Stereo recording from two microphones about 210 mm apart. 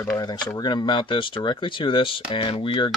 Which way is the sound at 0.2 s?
20° left (ahead or behind).